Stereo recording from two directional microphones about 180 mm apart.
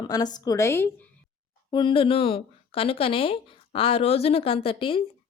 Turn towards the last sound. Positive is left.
turn(degrees=30)  # may be behind; listen again after turning